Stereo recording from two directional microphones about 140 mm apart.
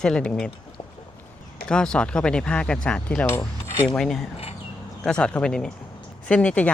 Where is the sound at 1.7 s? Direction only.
5° left (ahead or behind).